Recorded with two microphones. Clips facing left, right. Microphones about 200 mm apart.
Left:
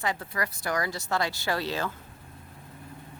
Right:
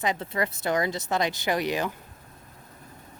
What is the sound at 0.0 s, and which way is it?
Speech, 20° right (ahead or behind).